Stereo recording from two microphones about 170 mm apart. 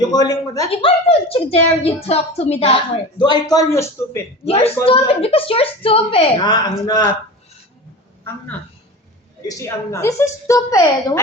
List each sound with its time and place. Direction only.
0.0 s speech: 25° left (ahead or behind)
0.7 s a woman's voice: 35° left (ahead or behind); by 4.2 s 15° left (ahead or behind)
4.4 s a woman's voice: 35° left (ahead or behind)
9.5 s a woman's voice: 15° left (ahead or behind)